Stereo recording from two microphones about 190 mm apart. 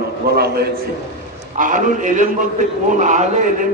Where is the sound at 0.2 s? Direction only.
50° right (ahead or behind).